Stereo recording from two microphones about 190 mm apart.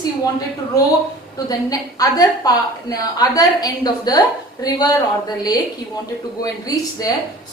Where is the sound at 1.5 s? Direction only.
20° left (ahead or behind).